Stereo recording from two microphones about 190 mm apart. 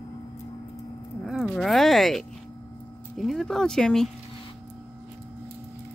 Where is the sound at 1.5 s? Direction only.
Centre (ahead or behind).